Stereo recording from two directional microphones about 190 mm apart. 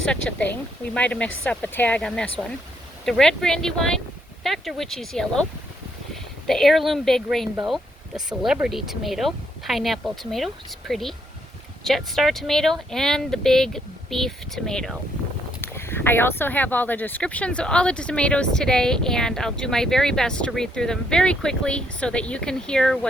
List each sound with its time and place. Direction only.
0.0 s speech: 5° left (ahead or behind)
6.5 s speech: centre (ahead or behind)